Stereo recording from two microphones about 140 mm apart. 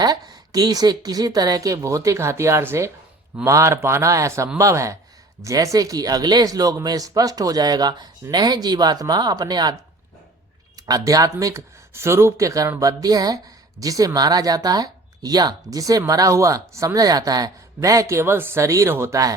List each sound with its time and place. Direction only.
0.0 s speech: 30° right (ahead or behind)
10.8 s speech: 25° right (ahead or behind)